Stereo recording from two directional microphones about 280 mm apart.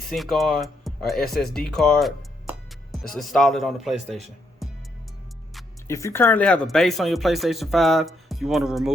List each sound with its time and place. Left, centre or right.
0.1 s speech: centre
1.5 s music: centre
3.1 s speech: centre
4.6 s music: centre
5.9 s speech: centre